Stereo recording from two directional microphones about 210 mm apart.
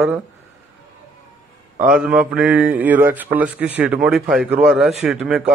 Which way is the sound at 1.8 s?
5° right (ahead or behind).